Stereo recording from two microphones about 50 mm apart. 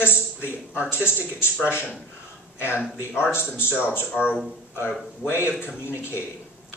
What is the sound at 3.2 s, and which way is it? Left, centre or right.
Speech, left.